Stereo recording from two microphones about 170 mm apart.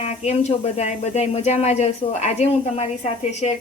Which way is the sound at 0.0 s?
40° left (ahead or behind).